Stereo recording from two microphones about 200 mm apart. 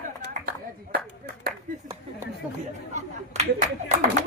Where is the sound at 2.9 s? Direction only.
35° right (ahead or behind).